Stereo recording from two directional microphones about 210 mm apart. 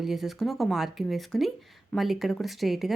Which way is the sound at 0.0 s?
Centre (ahead or behind).